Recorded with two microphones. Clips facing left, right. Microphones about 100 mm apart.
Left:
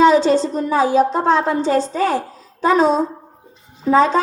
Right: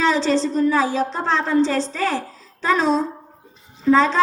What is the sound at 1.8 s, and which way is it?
Speech, 40° left (ahead or behind).